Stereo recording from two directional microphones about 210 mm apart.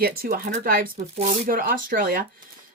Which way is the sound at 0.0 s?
45° right (ahead or behind).